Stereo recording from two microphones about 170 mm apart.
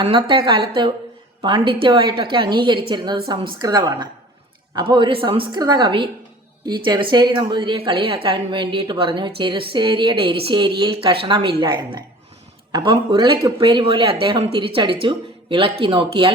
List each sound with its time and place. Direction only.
0.0 s a woman's voice: 30° right (ahead or behind)